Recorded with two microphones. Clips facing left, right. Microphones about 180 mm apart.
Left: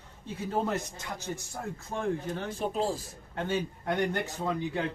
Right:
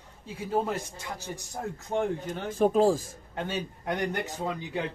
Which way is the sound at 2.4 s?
45° right (ahead or behind).